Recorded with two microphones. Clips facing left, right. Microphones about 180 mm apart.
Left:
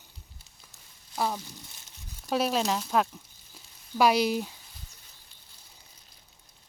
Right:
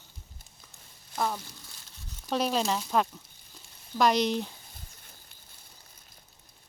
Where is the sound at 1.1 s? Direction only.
5° left (ahead or behind).